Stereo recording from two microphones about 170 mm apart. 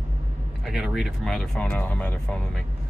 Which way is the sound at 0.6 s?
5° right (ahead or behind).